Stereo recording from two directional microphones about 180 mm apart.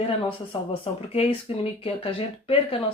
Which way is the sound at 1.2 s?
35° left (ahead or behind).